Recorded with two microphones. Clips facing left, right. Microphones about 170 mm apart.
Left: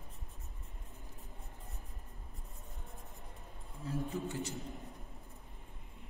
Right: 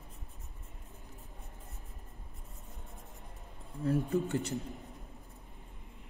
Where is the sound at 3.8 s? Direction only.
65° right (ahead or behind).